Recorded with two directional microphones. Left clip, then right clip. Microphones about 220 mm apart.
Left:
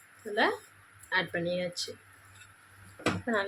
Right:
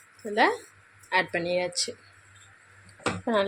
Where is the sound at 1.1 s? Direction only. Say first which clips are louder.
Right 5 dB; 20° right (ahead or behind).